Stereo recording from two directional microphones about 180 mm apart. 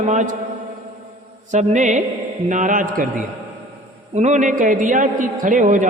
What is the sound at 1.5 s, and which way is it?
A man's voice, 40° right (ahead or behind).